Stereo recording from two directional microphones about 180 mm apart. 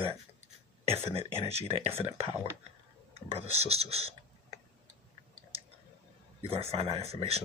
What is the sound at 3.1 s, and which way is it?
Speech, 35° right (ahead or behind).